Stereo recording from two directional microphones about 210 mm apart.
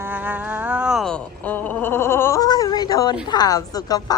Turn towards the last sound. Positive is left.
turn(degrees=20)  # may be behind; listen again after turning